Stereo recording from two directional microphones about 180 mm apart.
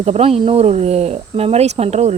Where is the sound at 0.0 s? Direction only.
35° right (ahead or behind).